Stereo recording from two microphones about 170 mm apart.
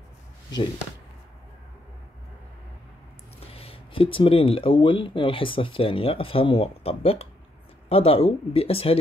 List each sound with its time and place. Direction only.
3.3 s speech: 35° left (ahead or behind)